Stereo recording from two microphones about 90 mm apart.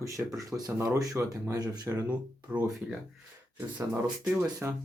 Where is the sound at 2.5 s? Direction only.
15° right (ahead or behind).